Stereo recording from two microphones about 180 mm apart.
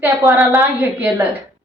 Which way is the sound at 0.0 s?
10° right (ahead or behind).